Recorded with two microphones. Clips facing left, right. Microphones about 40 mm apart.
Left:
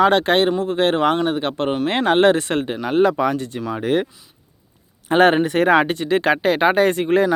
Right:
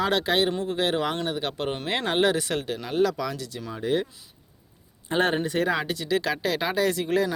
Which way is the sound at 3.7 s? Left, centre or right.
Left.